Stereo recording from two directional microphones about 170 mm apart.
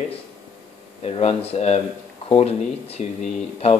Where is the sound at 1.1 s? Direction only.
35° left (ahead or behind).